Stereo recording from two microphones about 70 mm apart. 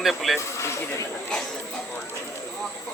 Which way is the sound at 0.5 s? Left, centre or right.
Left.